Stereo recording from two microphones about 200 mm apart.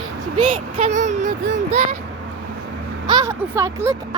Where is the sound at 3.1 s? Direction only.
15° right (ahead or behind).